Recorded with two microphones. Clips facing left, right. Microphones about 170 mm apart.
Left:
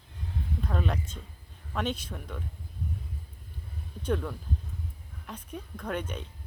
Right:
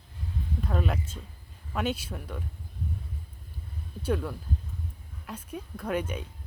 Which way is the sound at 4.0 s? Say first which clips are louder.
Right 1 dB; 5° right (ahead or behind).